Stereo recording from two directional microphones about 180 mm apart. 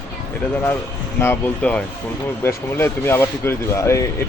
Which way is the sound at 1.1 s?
10° left (ahead or behind).